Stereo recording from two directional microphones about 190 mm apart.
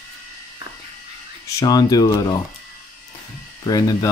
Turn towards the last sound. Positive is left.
turn(degrees=20)  # may be behind; listen again after turning